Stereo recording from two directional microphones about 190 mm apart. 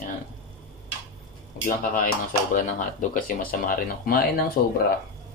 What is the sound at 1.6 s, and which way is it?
Speech, 45° left (ahead or behind).